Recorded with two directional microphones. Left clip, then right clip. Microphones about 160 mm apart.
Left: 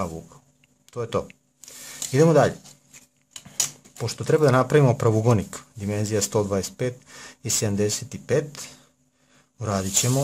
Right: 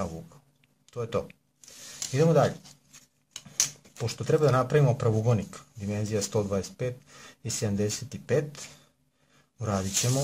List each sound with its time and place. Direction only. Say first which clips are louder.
0.8 s speech: left 4 dB; 20° left (ahead or behind)
2.1 s speech: left 6 dB; 35° left (ahead or behind)
4.0 s speech: left 5 dB; 15° left (ahead or behind)